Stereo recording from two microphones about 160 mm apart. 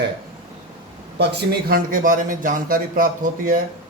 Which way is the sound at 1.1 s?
90° right.